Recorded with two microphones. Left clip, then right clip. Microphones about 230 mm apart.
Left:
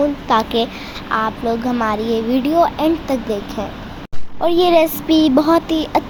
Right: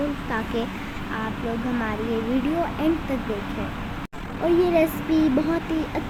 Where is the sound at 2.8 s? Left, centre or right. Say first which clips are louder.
Left 7 dB; left.